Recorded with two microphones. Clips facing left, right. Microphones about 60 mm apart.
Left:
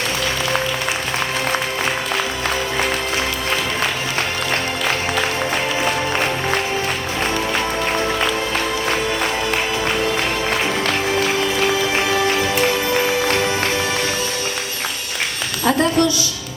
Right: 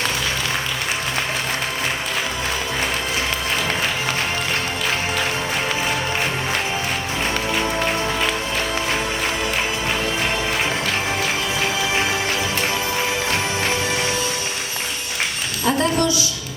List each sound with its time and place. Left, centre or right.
15.6 s a woman's voice: left